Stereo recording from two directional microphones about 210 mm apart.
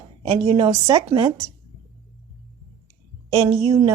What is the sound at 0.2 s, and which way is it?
A woman's voice, 30° right (ahead or behind).